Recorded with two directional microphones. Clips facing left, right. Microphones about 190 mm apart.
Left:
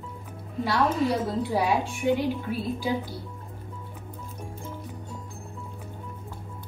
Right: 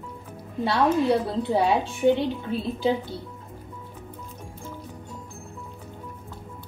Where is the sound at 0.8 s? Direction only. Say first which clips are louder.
Right 4 dB; centre (ahead or behind).